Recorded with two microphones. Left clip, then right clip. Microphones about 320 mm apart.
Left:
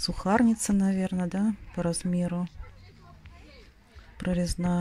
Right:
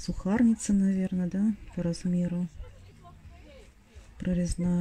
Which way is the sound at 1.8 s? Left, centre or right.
Centre.